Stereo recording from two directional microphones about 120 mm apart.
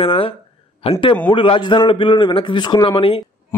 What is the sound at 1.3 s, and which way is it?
A man's voice, 45° left (ahead or behind).